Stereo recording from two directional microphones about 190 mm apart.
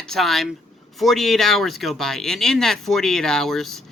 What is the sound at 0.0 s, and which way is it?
A man's voice, centre (ahead or behind).